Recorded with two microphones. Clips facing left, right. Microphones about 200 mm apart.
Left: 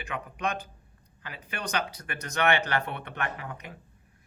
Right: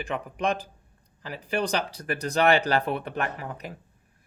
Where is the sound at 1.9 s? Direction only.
35° right (ahead or behind).